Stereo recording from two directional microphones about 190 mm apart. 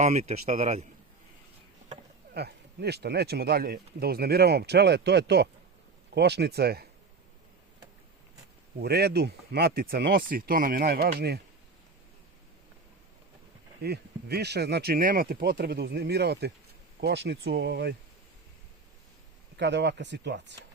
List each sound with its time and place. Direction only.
0.0 s speech: 35° right (ahead or behind)
2.3 s speech: 60° right (ahead or behind)
8.8 s speech: 55° right (ahead or behind)
13.8 s speech: 55° right (ahead or behind)
19.5 s speech: 65° right (ahead or behind)